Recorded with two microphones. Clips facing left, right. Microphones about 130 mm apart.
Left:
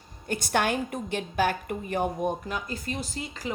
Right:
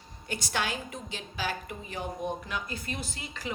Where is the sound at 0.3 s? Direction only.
55° left (ahead or behind).